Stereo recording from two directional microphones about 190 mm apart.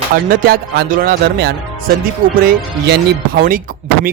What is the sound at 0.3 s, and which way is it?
Speech, 50° right (ahead or behind).